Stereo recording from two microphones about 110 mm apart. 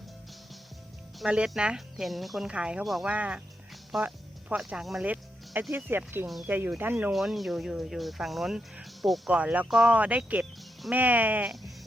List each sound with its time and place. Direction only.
1.2 s speech: 5° right (ahead or behind)
4.0 s music: 15° right (ahead or behind)
4.6 s speech: centre (ahead or behind)
5.0 s music: 15° right (ahead or behind)
5.7 s speech: 20° right (ahead or behind)
7.1 s speech: centre (ahead or behind)
9.3 s speech: 10° right (ahead or behind)
9.6 s speech: centre (ahead or behind)
9.9 s speech: 15° right (ahead or behind)